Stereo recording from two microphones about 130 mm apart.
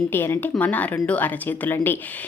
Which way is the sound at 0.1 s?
15° left (ahead or behind).